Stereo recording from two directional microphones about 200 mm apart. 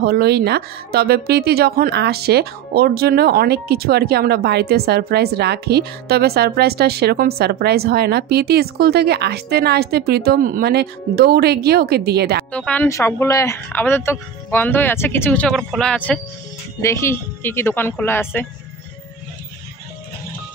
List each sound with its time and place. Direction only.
0.0 s speech: 55° right (ahead or behind)
12.5 s speech: 5° left (ahead or behind)